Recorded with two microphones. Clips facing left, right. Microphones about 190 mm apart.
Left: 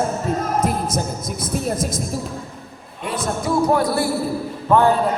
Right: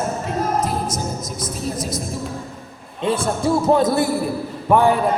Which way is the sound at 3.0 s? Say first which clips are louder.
Right 4 dB; 30° right (ahead or behind).